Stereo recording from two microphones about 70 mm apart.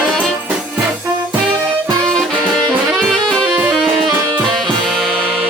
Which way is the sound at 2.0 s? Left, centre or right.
Centre.